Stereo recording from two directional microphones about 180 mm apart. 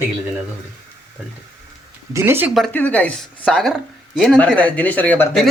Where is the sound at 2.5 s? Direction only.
5° left (ahead or behind).